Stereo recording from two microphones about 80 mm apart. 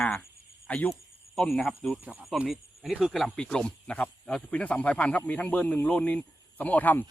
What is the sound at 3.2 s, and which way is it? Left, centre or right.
Speech, centre.